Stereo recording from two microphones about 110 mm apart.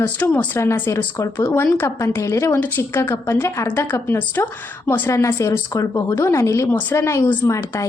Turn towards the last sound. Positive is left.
turn(degrees=25)  # may be behind; listen again after turning